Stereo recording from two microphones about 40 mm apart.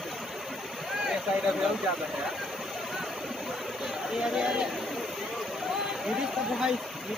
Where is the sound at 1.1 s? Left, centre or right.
Centre.